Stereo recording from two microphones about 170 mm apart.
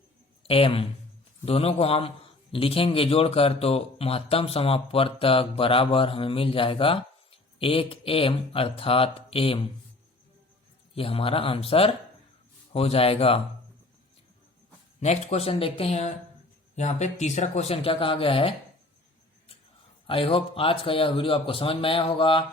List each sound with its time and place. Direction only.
0.4 s a man's voice: 35° left (ahead or behind)
10.9 s a man's voice: 35° left (ahead or behind)
15.0 s a man's voice: 40° left (ahead or behind)
20.1 s a man's voice: 30° left (ahead or behind)